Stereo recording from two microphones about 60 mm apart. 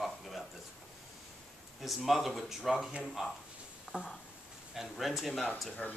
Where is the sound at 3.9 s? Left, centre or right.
Centre.